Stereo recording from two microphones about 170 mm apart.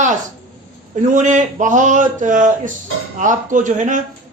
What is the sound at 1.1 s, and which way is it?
Speech, 45° right (ahead or behind).